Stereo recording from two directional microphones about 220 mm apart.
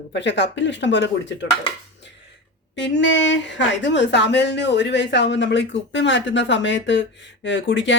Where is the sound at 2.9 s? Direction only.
55° left (ahead or behind).